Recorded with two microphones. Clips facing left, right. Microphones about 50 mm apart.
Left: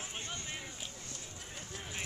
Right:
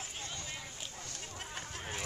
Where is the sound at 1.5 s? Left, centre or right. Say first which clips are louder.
Right 2 dB; right.